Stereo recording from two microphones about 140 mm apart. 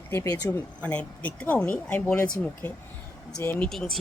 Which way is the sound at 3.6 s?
Centre (ahead or behind).